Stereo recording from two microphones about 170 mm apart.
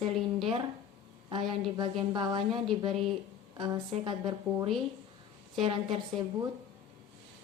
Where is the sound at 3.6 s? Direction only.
20° right (ahead or behind).